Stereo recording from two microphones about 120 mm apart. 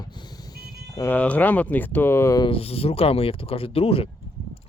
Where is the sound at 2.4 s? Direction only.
55° left (ahead or behind).